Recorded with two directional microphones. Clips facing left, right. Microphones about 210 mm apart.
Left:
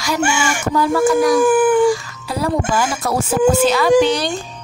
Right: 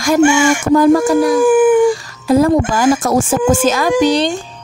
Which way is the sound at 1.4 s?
15° right (ahead or behind).